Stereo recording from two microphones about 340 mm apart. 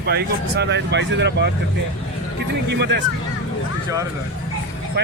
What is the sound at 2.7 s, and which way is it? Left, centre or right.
Speech, right.